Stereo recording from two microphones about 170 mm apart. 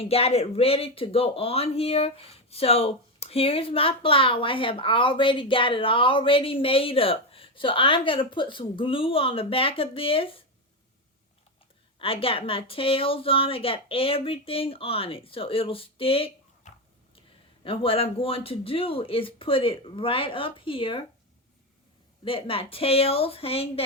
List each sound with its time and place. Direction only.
0.0 s speech: 35° left (ahead or behind)
11.9 s speech: 35° left (ahead or behind)
22.2 s speech: 30° left (ahead or behind)